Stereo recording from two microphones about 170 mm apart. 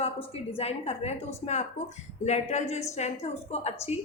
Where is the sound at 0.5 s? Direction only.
35° left (ahead or behind).